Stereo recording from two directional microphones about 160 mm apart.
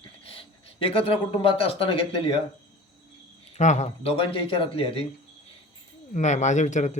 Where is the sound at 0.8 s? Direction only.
35° left (ahead or behind).